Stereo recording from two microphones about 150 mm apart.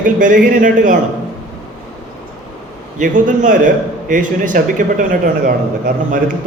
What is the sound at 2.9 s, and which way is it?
A man's voice, 60° right (ahead or behind).